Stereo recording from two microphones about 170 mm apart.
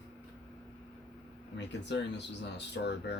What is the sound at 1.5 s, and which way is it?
Speech, 90° left.